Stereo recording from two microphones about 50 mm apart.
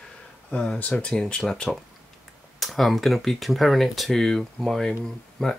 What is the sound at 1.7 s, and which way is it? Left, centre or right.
Speech, centre.